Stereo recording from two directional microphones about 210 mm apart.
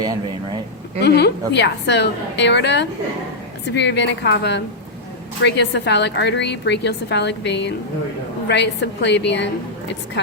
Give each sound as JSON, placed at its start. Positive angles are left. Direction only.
{"t": 0.0, "sound": "speech", "side_deg": -20}
{"t": 1.0, "sound": "a woman's voice", "side_deg": 50}